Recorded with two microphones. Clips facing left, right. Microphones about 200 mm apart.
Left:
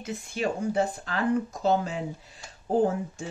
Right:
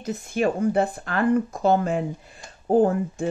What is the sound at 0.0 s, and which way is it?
Speech, 45° right (ahead or behind).